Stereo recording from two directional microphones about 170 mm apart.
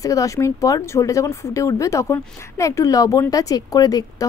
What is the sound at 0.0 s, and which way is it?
Speech, 20° left (ahead or behind).